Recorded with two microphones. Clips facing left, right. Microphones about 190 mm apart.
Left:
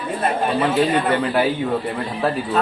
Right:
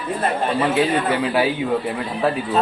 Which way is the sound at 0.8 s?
10° right (ahead or behind).